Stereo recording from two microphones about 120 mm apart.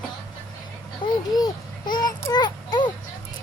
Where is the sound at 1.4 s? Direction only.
35° left (ahead or behind).